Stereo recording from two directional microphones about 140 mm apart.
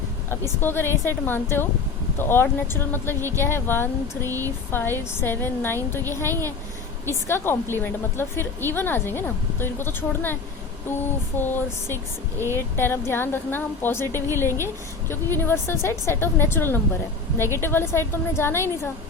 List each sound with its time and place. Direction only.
0.3 s a woman's voice: 15° left (ahead or behind)